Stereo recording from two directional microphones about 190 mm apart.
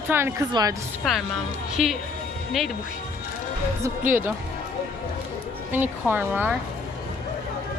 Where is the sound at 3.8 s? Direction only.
10° right (ahead or behind).